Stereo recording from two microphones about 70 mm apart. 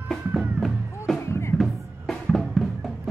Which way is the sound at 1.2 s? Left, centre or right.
Left.